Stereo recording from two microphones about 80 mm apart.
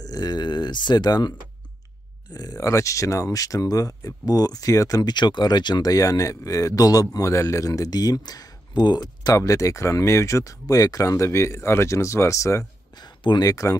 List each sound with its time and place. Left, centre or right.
0.0 s speech: left
2.3 s speech: left
5.1 s speech: left
9.4 s speech: left
12.9 s a sound: left
13.5 s speech: left